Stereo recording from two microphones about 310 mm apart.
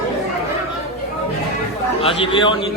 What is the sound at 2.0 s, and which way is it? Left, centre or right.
Speech, centre.